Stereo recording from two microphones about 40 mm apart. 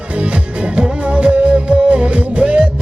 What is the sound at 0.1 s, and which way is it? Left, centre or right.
Music, right.